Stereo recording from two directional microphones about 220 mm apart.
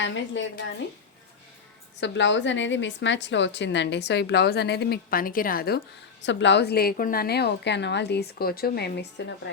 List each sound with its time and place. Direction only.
0.0 s a woman's voice: 55° left (ahead or behind)
2.0 s a woman's voice: 55° left (ahead or behind)